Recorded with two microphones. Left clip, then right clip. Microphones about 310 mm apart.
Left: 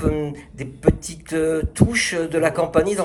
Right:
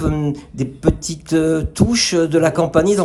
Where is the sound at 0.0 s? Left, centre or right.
Centre.